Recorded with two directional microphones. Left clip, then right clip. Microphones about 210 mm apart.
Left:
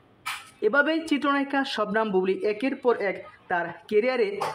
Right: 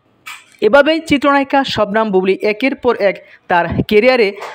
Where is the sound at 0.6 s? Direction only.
30° right (ahead or behind).